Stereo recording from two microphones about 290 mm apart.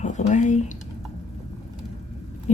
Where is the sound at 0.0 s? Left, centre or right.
Left.